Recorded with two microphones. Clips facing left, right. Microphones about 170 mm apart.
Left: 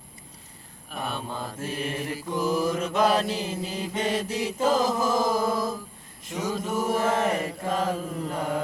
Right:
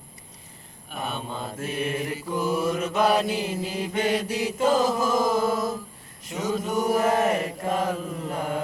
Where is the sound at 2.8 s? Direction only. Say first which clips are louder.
Right 2 dB; 5° right (ahead or behind).